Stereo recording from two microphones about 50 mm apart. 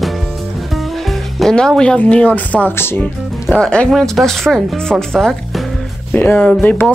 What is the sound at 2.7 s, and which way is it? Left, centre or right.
Speech, left.